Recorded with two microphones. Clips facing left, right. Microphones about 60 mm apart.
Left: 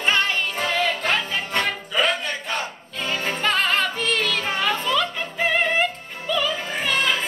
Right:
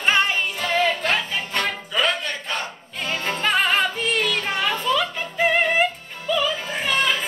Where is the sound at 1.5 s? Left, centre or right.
Centre.